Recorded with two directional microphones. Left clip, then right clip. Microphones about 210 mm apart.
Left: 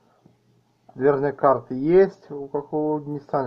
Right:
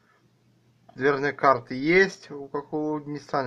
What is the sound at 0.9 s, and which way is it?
Speech, 15° left (ahead or behind).